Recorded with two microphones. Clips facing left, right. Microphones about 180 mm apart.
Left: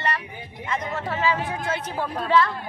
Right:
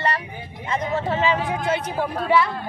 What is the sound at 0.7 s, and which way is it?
A woman's voice, 30° right (ahead or behind).